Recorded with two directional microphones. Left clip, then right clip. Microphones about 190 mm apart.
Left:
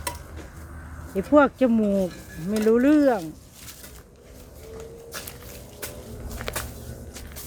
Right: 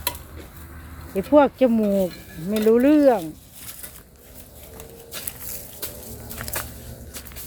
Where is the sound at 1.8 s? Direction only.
25° right (ahead or behind).